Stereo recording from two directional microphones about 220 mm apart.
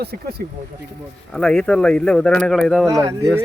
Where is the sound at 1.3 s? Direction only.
5° left (ahead or behind).